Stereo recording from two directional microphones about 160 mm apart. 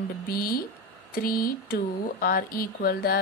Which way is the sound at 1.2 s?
65° left (ahead or behind).